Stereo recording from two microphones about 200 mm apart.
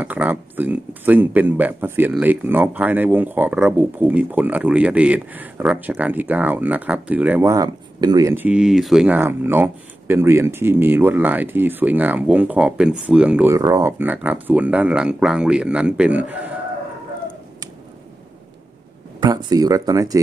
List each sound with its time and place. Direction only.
0.0 s speech: 10° right (ahead or behind)
19.1 s speech: 20° right (ahead or behind)